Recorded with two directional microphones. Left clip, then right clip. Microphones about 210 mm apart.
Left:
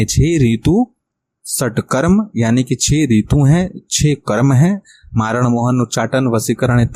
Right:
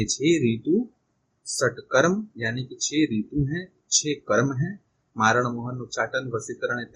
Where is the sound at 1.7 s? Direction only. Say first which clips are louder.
Left 5 dB; 45° left (ahead or behind).